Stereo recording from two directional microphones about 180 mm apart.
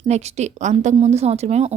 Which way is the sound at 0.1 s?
40° right (ahead or behind).